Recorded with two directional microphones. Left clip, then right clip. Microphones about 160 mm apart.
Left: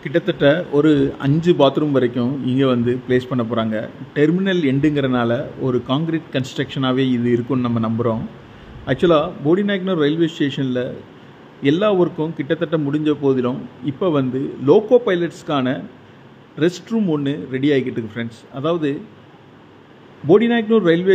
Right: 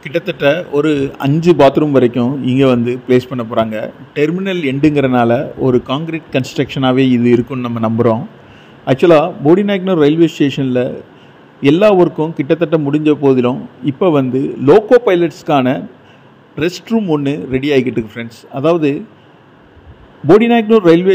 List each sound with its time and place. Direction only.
0.0 s a man's voice: 25° right (ahead or behind)
20.2 s a man's voice: 30° right (ahead or behind)